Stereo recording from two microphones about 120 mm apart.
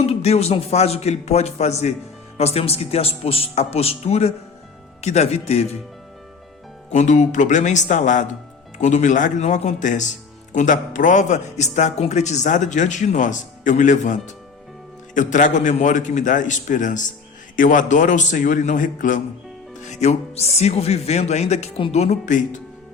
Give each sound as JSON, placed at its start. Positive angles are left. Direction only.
{"t": 0.0, "sound": "a man's voice", "side_deg": 60}
{"t": 6.9, "sound": "a man's voice", "side_deg": 90}
{"t": 19.8, "sound": "a man's voice", "side_deg": 75}